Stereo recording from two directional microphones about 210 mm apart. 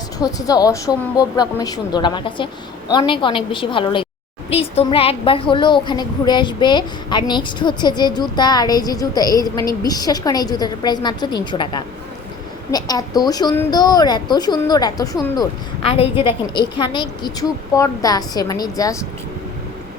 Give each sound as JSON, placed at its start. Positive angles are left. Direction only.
{"t": 0.2, "sound": "a woman's voice", "side_deg": 15}
{"t": 15.8, "sound": "a child's voice", "side_deg": 30}